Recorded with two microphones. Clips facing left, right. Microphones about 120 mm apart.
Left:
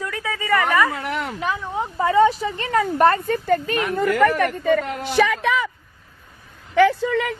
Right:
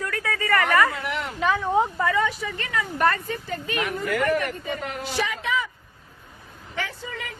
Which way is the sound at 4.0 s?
65° left (ahead or behind).